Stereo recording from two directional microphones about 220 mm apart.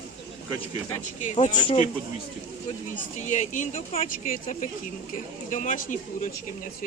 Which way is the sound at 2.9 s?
35° left (ahead or behind).